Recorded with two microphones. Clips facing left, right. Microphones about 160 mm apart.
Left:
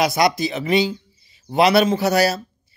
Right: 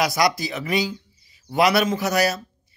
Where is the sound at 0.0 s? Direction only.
25° left (ahead or behind).